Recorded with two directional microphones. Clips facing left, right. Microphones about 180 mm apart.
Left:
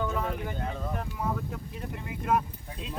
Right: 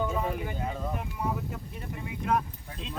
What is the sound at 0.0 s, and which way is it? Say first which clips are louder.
Speech: right 1 dB; 10° right (ahead or behind).